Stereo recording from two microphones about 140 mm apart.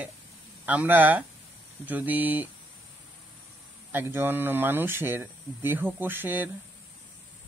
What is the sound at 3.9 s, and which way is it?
Speech, 15° right (ahead or behind).